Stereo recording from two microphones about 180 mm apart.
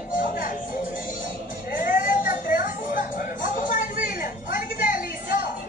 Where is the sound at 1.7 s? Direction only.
50° left (ahead or behind).